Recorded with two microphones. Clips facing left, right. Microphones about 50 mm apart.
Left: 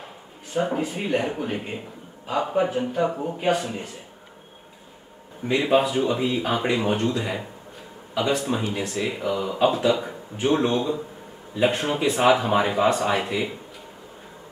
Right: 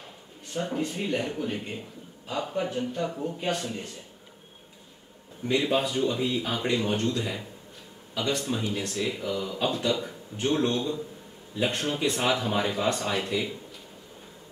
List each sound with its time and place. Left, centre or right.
0.5 s a man's voice: centre
5.4 s a man's voice: centre
8.5 s a man's voice: centre